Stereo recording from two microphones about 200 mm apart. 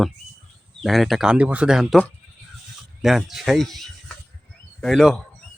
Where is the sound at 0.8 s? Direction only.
Centre (ahead or behind).